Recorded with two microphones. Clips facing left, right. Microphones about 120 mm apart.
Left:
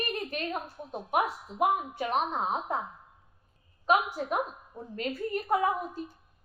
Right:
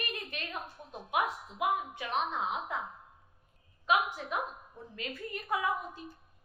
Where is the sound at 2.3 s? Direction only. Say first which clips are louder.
Left 4 dB; 40° left (ahead or behind).